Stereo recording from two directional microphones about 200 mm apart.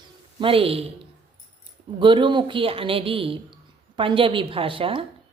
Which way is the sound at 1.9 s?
25° right (ahead or behind).